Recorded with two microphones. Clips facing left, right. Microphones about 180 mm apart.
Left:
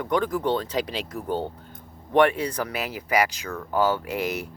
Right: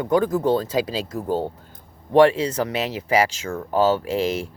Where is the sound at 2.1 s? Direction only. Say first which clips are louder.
Right 5 dB; 25° right (ahead or behind).